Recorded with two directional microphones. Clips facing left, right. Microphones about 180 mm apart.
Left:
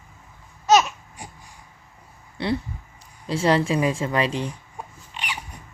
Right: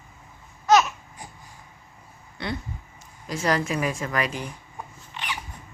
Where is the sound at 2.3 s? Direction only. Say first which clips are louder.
Left 6 dB; 30° left (ahead or behind).